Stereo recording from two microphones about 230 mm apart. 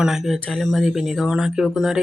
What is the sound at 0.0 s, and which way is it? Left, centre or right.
Speech, centre.